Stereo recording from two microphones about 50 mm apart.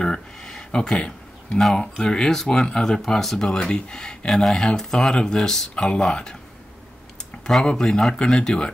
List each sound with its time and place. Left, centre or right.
0.0 s a sound: centre
1.6 s speech: centre
7.6 s speech: centre